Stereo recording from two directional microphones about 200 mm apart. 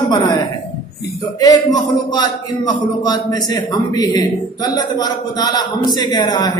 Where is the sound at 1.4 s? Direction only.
20° left (ahead or behind).